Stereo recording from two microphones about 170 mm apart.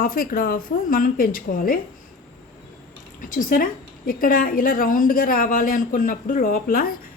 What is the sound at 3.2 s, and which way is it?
Speech, 55° left (ahead or behind).